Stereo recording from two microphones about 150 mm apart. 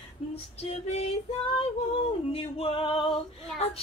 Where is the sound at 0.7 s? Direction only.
45° left (ahead or behind).